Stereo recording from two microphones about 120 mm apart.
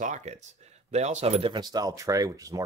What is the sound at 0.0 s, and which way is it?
Speech, 75° right (ahead or behind).